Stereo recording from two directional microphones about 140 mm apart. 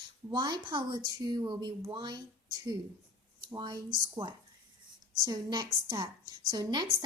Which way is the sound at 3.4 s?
30° right (ahead or behind).